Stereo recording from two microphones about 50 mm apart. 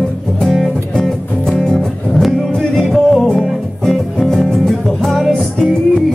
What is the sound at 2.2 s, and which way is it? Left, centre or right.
Music, centre.